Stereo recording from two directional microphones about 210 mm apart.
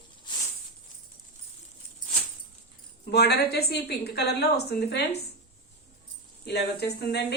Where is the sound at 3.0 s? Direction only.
50° left (ahead or behind).